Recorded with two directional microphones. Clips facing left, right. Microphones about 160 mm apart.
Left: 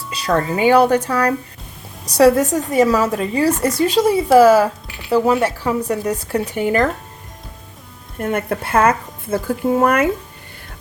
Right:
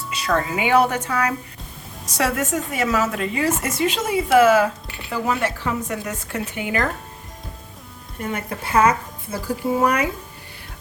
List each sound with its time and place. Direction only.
0.1 s a woman's voice: 30° left (ahead or behind)
8.2 s a woman's voice: 55° left (ahead or behind)